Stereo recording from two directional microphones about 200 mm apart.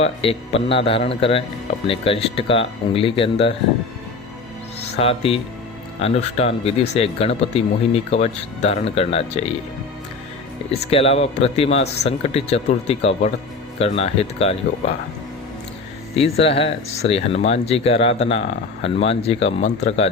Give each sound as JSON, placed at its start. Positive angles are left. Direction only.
{"t": 0.0, "sound": "speech", "side_deg": 30}
{"t": 4.9, "sound": "speech", "side_deg": 30}
{"t": 10.7, "sound": "speech", "side_deg": 30}
{"t": 16.1, "sound": "speech", "side_deg": 30}